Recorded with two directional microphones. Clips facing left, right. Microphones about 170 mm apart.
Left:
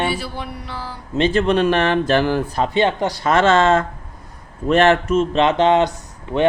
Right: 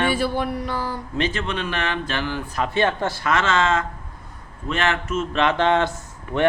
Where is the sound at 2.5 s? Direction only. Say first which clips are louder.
Left 4 dB; 20° left (ahead or behind).